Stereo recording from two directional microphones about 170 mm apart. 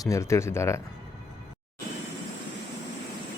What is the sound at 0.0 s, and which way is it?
Speech, 15° left (ahead or behind).